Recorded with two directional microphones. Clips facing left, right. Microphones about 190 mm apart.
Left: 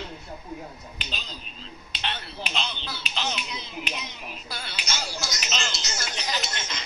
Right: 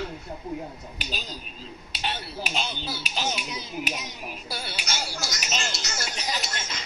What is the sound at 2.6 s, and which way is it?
Speech, 40° right (ahead or behind).